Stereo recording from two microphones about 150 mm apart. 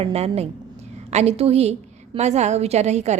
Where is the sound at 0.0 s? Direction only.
45° right (ahead or behind).